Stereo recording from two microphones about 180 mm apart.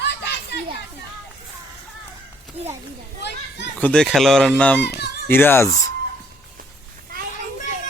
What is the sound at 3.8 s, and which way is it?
Speech, 5° left (ahead or behind).